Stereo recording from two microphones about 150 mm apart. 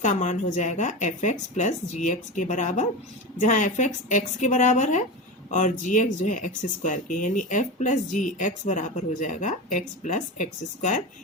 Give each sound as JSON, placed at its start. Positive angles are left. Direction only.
{"t": 0.0, "sound": "speech", "side_deg": 55}